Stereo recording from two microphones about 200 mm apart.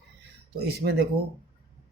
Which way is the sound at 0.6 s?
55° right (ahead or behind).